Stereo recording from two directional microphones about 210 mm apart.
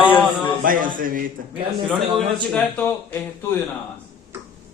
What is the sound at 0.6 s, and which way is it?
Speech, 40° right (ahead or behind).